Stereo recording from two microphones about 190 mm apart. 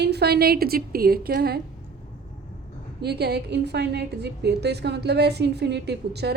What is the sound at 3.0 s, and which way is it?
A woman's voice, 60° right (ahead or behind).